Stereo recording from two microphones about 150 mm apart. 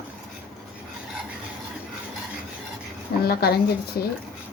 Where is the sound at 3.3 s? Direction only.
90° left.